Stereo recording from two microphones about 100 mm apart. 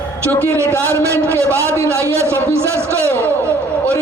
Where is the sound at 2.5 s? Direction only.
25° right (ahead or behind).